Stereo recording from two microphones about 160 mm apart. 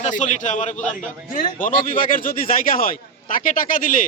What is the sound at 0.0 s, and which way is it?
A man's voice, 50° left (ahead or behind).